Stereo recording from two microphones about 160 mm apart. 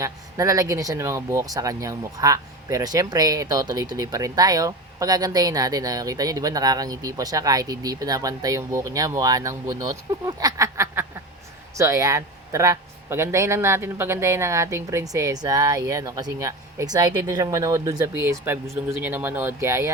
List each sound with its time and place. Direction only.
0.0 s speech: 20° right (ahead or behind)